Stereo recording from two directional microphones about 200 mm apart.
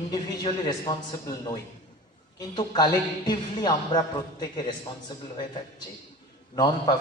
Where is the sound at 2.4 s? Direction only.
20° left (ahead or behind).